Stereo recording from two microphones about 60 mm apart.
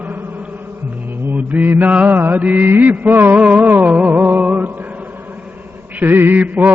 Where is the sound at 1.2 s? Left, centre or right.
Right.